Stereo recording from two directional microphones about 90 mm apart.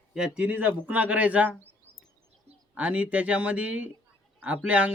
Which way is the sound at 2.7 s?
15° right (ahead or behind).